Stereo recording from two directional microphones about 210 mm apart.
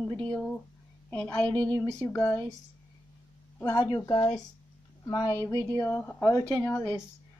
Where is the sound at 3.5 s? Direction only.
20° left (ahead or behind).